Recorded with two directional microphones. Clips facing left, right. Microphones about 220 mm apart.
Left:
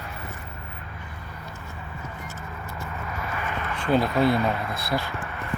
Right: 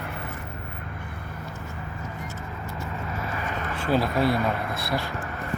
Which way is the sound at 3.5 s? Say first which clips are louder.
Right 1 dB; 40° right (ahead or behind).